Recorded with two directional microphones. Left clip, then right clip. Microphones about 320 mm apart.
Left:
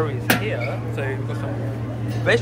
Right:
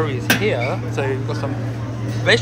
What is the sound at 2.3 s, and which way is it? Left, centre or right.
Speech, centre.